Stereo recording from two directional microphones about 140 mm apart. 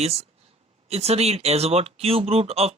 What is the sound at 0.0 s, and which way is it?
Speech, 50° right (ahead or behind).